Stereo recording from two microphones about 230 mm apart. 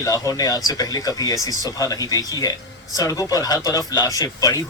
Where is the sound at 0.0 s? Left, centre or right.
Centre.